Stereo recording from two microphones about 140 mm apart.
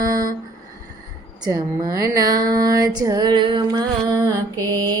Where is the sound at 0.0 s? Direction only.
25° right (ahead or behind).